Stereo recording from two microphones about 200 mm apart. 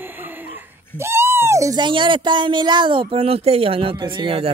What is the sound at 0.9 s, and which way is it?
Speech, 15° right (ahead or behind).